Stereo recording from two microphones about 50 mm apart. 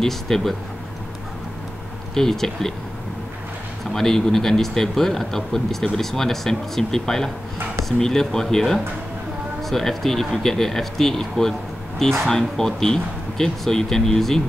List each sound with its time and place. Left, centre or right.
0.0 s speech: centre
2.1 s speech: centre
3.9 s speech: centre